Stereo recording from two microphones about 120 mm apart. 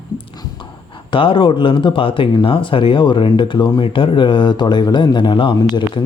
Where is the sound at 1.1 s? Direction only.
45° left (ahead or behind).